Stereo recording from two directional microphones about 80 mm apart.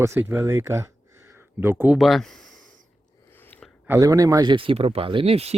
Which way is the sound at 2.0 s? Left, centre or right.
Centre.